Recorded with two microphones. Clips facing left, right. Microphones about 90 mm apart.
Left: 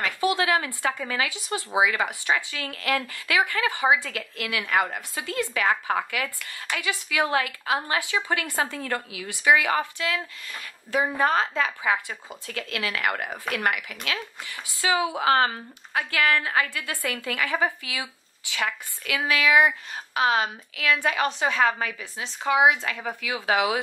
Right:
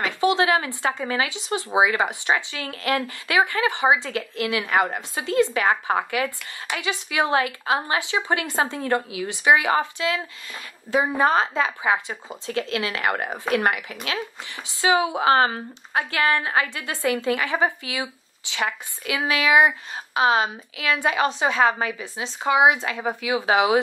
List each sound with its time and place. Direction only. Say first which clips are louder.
0.0 s speech: right 4 dB; 25° right (ahead or behind)